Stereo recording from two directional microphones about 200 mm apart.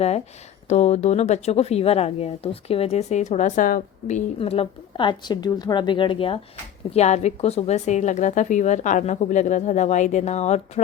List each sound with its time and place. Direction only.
0.7 s speech: 35° left (ahead or behind)